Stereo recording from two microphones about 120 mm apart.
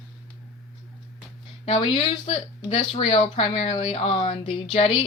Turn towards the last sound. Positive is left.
turn(degrees=50)  # may be behind; listen again after turning